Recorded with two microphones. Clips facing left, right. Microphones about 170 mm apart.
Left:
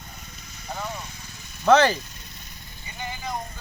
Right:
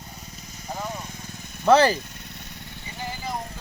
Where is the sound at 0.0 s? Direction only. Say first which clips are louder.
Right 2 dB; 35° right (ahead or behind); by 1.6 s 50° right (ahead or behind).